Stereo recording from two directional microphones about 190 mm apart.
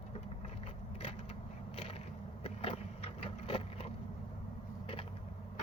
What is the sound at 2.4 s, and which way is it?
Vehicle, 30° left (ahead or behind).